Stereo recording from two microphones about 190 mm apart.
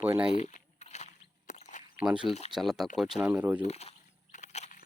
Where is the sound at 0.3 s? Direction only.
35° left (ahead or behind).